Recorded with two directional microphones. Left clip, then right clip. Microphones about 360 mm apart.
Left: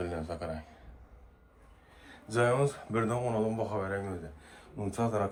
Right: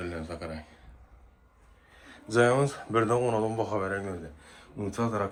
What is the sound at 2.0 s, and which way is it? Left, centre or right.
Speech, centre.